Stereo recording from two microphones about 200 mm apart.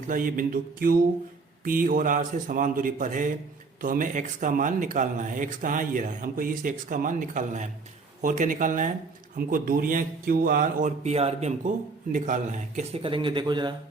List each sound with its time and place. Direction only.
0.1 s a man's voice: 45° right (ahead or behind); by 13.7 s 25° right (ahead or behind)